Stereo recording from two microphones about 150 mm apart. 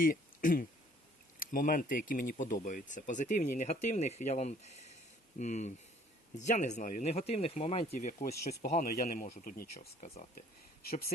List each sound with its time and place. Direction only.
0.0 s speech: 65° left (ahead or behind)
7.1 s speech: 45° left (ahead or behind); by 8.7 s 90° left
8.7 s speech: 70° left (ahead or behind)